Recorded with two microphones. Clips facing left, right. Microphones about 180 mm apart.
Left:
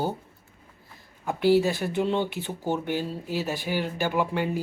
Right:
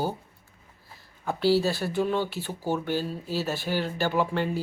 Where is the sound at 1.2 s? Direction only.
15° left (ahead or behind).